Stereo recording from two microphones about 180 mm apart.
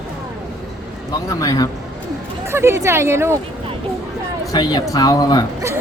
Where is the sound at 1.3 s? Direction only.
20° left (ahead or behind).